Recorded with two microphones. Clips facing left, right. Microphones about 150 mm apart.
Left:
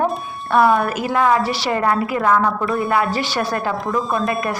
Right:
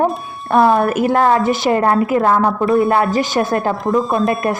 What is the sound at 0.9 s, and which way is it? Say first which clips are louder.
Speech: right 6 dB; 55° right (ahead or behind).